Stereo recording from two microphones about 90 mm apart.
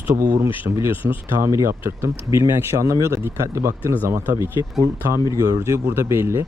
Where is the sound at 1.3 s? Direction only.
35° right (ahead or behind).